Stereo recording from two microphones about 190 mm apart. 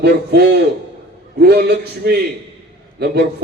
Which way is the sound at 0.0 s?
60° right (ahead or behind).